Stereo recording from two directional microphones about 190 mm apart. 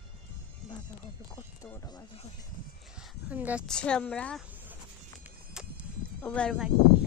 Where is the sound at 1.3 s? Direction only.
15° left (ahead or behind).